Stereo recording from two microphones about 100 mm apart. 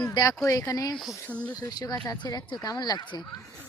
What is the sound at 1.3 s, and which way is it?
Speech, 15° left (ahead or behind).